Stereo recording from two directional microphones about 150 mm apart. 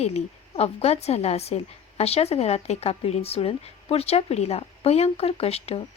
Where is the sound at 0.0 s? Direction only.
45° left (ahead or behind).